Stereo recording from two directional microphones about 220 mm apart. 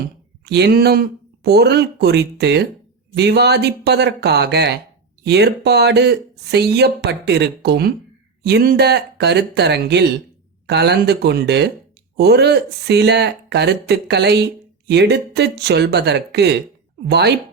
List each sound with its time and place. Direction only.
0.4 s speech: 50° right (ahead or behind)